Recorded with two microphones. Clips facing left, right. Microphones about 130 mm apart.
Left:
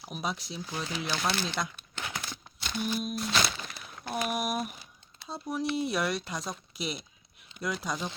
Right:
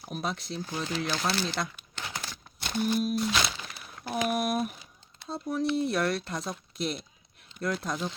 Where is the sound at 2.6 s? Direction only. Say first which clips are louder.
Right 4 dB; 50° right (ahead or behind).